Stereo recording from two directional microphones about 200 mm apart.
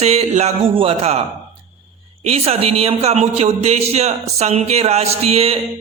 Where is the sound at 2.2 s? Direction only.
30° right (ahead or behind).